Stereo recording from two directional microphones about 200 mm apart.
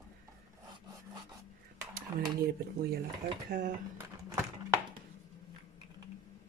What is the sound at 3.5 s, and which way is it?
Speech, 40° right (ahead or behind).